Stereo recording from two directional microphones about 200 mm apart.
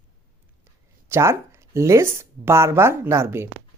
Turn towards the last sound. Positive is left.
turn(degrees=-10)  # may be behind; listen again after turning